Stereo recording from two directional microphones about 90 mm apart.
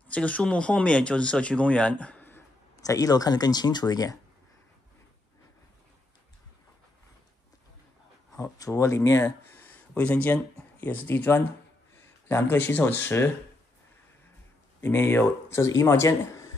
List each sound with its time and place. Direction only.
0.1 s speech: 15° left (ahead or behind)
2.8 s speech: 40° left (ahead or behind)
8.4 s speech: 35° left (ahead or behind)
14.8 s speech: 25° left (ahead or behind)